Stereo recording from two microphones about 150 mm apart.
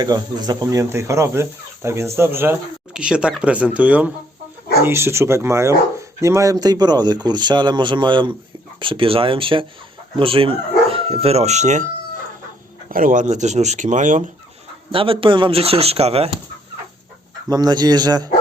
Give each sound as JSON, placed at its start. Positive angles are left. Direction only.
{"t": 0.0, "sound": "speech", "side_deg": -25}
{"t": 12.9, "sound": "speech", "side_deg": -65}
{"t": 14.9, "sound": "speech", "side_deg": -35}
{"t": 17.5, "sound": "speech", "side_deg": -25}